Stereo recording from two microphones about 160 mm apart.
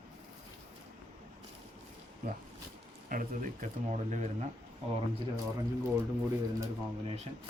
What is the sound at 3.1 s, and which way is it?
Speech, 55° right (ahead or behind).